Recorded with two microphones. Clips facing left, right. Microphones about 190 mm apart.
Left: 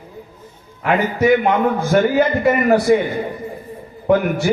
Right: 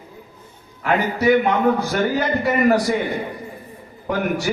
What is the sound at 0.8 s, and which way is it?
A man's voice, 50° left (ahead or behind).